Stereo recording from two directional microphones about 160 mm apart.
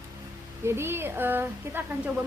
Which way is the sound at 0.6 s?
15° right (ahead or behind).